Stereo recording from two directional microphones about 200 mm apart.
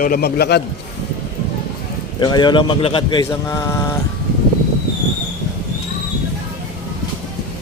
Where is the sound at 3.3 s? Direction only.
15° left (ahead or behind).